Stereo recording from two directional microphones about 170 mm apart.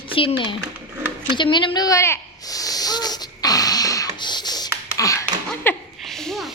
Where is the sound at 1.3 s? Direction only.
25° left (ahead or behind).